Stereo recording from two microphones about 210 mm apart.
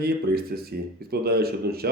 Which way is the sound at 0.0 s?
45° right (ahead or behind).